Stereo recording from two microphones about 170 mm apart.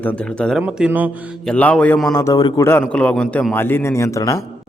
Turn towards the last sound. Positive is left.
turn(degrees=15)  # may be behind; listen again after turning